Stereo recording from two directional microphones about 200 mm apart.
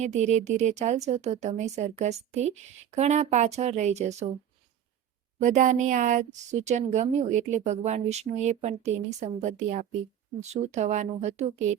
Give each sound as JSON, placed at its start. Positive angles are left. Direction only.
{"t": 0.0, "sound": "a woman's voice", "side_deg": -35}
{"t": 5.4, "sound": "a woman's voice", "side_deg": -40}